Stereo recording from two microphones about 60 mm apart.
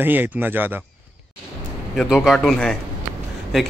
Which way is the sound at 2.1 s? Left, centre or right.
Centre.